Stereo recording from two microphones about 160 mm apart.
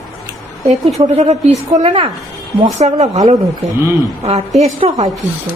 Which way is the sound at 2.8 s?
45° right (ahead or behind).